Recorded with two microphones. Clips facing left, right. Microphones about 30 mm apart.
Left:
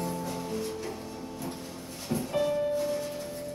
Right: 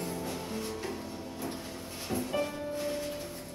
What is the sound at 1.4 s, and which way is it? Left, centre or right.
Music, right.